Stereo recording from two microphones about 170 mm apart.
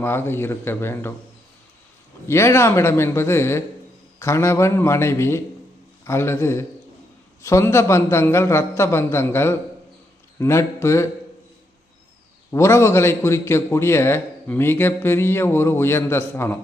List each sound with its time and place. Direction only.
0.0 s a man's voice: 15° left (ahead or behind)
2.2 s a man's voice: 15° left (ahead or behind)
12.5 s a man's voice: 15° left (ahead or behind)